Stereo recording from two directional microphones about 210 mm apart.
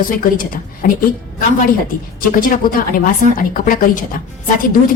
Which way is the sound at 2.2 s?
40° left (ahead or behind).